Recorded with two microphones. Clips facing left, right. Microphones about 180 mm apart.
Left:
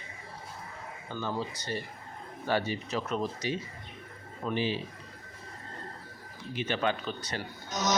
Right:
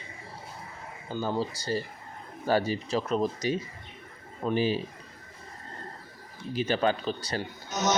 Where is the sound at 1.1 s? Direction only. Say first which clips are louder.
Right 4 dB; 35° right (ahead or behind).